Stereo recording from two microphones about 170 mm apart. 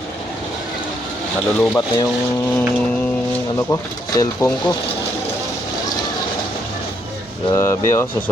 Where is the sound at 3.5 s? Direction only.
20° left (ahead or behind).